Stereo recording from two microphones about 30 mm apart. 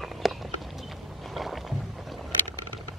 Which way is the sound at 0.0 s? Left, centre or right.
Centre.